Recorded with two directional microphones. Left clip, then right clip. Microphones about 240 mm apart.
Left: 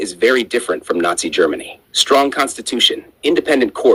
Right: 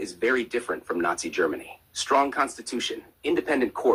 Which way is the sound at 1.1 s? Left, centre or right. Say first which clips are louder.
Left 10 dB; left.